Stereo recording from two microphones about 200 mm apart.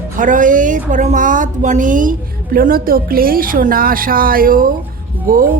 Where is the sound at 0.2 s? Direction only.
40° right (ahead or behind).